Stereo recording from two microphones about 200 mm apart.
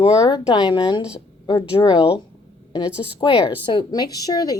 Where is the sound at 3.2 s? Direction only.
25° left (ahead or behind).